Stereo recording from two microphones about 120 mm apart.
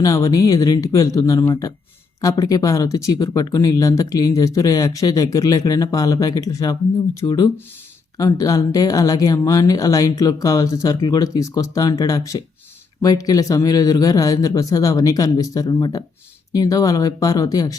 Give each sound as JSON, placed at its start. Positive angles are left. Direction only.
{"t": 0.0, "sound": "speech", "side_deg": 30}